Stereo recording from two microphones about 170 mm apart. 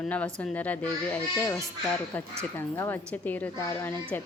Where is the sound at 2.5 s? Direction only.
15° left (ahead or behind).